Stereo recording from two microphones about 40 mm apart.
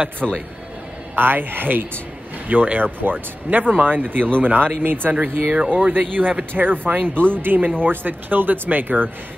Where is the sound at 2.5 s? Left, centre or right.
Right.